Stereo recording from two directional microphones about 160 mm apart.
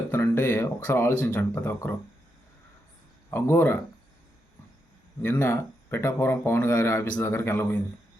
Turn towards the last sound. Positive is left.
turn(degrees=15)  # may be behind; listen again after turning